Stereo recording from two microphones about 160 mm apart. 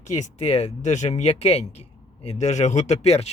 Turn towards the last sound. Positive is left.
turn(degrees=40)  # may be behind; listen again after turning